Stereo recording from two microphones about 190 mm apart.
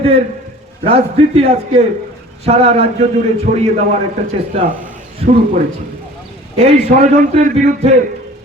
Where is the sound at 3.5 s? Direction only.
45° right (ahead or behind).